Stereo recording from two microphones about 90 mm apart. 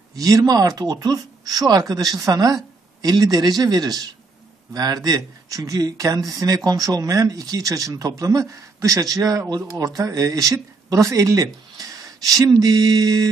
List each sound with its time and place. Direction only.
0.1 s speech: 40° right (ahead or behind)